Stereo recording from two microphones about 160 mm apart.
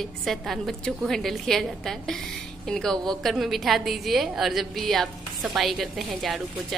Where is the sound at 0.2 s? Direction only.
Centre (ahead or behind).